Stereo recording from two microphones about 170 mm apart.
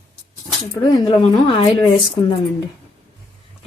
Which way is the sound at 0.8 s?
25° left (ahead or behind).